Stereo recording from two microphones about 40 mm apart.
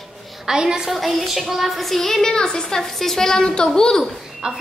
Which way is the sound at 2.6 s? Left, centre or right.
Centre.